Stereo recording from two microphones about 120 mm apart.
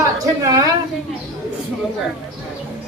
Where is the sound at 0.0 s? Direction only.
30° right (ahead or behind).